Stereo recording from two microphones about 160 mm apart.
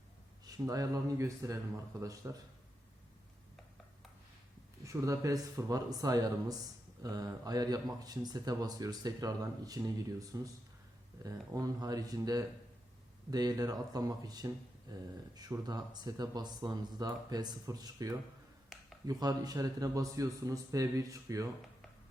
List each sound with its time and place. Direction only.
0.4 s speech: 20° right (ahead or behind)
4.8 s speech: 20° right (ahead or behind)
18.7 s a sound: centre (ahead or behind)
19.0 s speech: 25° right (ahead or behind)